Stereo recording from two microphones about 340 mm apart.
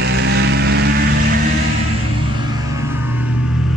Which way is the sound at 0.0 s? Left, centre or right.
Right.